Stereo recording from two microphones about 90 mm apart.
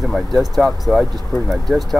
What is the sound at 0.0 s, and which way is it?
Speech, centre (ahead or behind).